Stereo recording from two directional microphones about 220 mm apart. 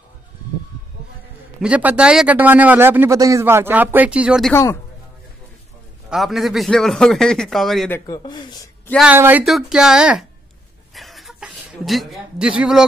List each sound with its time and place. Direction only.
1.6 s a man's voice: 5° right (ahead or behind)
6.0 s a man's voice: centre (ahead or behind)
8.1 s speech: 20° left (ahead or behind)
8.9 s a man's voice: 5° right (ahead or behind)
11.0 s chuckle: centre (ahead or behind)